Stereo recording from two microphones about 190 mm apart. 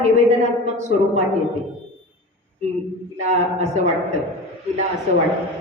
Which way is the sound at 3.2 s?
35° right (ahead or behind).